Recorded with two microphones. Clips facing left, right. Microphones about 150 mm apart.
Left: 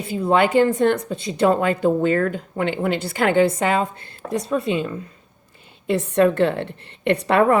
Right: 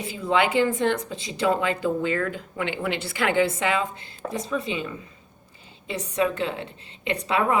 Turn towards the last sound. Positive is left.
turn(degrees=60)  # may be behind; listen again after turning